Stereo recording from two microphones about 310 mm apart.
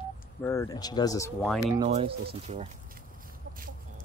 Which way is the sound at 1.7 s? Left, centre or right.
Centre.